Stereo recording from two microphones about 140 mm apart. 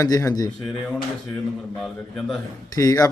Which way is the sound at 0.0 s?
25° left (ahead or behind).